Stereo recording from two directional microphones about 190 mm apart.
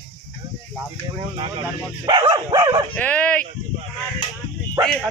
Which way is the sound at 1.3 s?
30° right (ahead or behind).